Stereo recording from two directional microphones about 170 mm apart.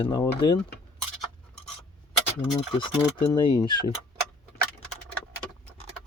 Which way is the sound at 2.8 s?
25° left (ahead or behind).